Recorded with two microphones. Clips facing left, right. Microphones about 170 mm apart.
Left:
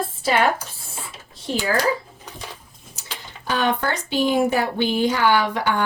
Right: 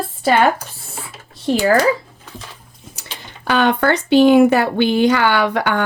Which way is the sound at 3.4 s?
70° right (ahead or behind).